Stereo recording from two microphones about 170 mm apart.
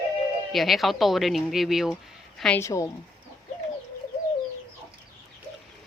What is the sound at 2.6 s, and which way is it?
Speech, 20° left (ahead or behind).